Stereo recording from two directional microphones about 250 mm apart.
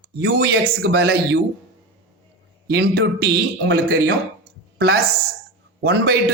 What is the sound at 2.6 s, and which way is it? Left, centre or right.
A man's voice, right.